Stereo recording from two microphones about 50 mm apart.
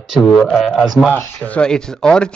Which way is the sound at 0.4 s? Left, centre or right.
Centre.